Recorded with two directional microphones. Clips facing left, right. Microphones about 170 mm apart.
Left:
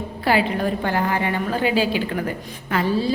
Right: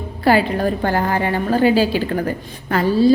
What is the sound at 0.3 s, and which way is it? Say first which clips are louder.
A woman's voice: right 4 dB; 40° right (ahead or behind).